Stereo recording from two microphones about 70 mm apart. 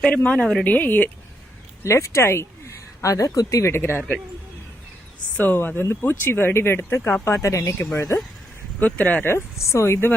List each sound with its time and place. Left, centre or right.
0.0 s a woman's voice: centre
0.6 s speech: left
1.8 s speech: left
5.4 s speech: left
8.8 s speech: left
9.2 s speech: left